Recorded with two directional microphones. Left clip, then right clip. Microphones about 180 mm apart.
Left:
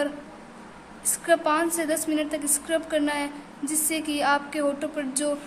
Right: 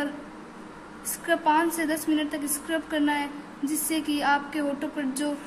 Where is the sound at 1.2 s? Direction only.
25° left (ahead or behind).